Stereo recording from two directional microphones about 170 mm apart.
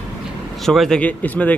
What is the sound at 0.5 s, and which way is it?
Speech, centre (ahead or behind).